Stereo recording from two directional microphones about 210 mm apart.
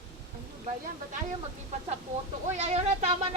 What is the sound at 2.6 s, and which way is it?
Speech, 30° right (ahead or behind).